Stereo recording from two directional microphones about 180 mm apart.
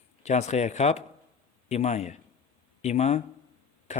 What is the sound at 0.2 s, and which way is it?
A man's voice, 40° left (ahead or behind).